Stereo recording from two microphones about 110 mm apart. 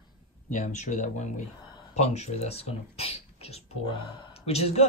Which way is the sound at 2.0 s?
80° left.